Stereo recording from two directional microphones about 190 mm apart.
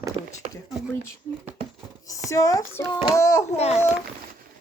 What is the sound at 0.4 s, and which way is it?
Speech, 35° right (ahead or behind).